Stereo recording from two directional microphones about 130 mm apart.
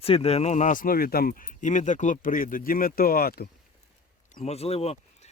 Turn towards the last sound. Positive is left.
turn(degrees=50)  # may be behind; listen again after turning